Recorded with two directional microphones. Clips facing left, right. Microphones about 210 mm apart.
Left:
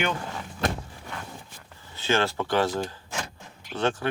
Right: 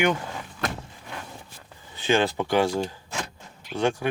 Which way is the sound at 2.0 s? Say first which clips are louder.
Right 3 dB; 15° right (ahead or behind).